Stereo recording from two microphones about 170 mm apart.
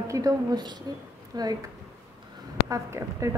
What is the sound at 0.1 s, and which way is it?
A woman's voice, 20° right (ahead or behind).